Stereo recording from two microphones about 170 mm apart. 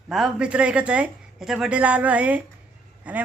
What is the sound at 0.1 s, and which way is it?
A woman's voice, 5° right (ahead or behind).